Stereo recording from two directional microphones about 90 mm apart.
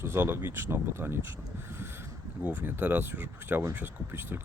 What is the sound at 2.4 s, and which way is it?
Speech, 20° right (ahead or behind).